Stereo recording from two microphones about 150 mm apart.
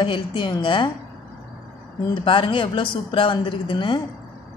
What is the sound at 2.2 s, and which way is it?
A woman's voice, 35° left (ahead or behind).